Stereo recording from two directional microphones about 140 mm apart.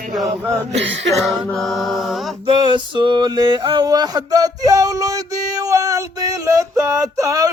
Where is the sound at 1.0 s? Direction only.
Centre (ahead or behind).